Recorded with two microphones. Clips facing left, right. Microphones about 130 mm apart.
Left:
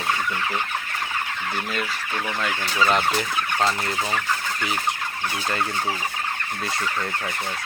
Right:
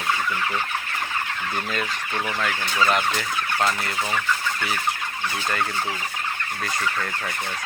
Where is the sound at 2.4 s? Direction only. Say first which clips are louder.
Left 1 dB; 20° left (ahead or behind).